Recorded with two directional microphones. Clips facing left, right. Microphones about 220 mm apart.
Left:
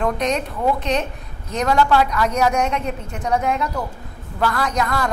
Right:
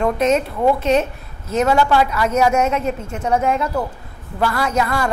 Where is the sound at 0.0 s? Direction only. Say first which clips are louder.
Right 4 dB; 5° right (ahead or behind).